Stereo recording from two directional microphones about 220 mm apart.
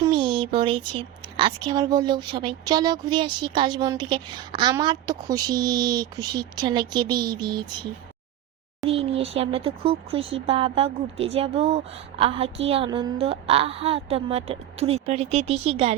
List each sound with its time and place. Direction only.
0.0 s a woman's voice: 20° right (ahead or behind)
8.9 s a woman's voice: 25° right (ahead or behind)